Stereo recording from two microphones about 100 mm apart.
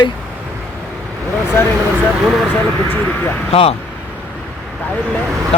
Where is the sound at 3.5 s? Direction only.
85° left.